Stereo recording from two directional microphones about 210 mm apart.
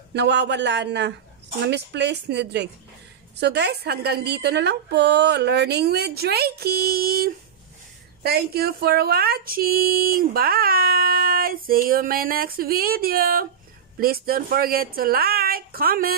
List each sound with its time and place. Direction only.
0.1 s a woman's voice: 55° right (ahead or behind)